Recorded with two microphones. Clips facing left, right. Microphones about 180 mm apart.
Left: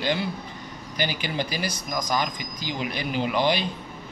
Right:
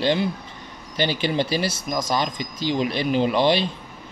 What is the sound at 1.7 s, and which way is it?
Speech, 25° right (ahead or behind).